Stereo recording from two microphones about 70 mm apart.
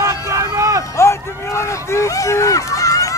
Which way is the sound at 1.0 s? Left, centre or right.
Left.